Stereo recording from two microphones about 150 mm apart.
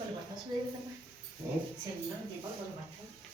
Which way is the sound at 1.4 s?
15° right (ahead or behind).